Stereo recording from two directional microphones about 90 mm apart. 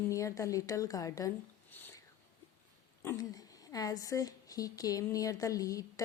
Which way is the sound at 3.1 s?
40° left (ahead or behind).